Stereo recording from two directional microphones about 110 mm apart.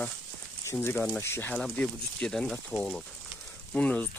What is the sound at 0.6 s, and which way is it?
Speech, 20° left (ahead or behind).